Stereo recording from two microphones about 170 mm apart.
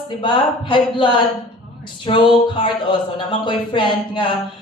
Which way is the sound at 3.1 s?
30° left (ahead or behind).